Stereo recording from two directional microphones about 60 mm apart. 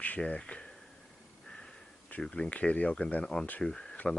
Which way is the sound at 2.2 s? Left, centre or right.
Centre.